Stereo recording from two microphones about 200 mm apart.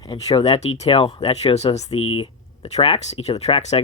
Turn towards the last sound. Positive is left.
turn(degrees=30)  # may be behind; listen again after turning